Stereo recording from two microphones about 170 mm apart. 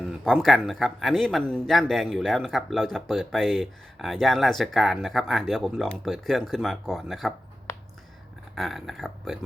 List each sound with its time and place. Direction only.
0.0 s speech: centre (ahead or behind)
7.7 s a sound: 15° left (ahead or behind)
8.5 s speech: centre (ahead or behind)